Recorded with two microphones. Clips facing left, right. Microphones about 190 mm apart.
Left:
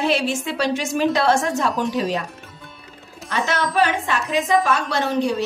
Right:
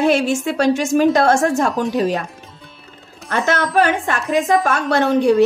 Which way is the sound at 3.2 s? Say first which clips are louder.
Right 4 dB; 50° right (ahead or behind).